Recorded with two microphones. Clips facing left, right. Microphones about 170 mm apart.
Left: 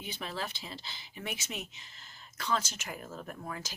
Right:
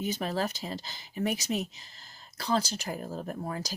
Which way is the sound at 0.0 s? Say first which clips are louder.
Right 8 dB; 40° right (ahead or behind).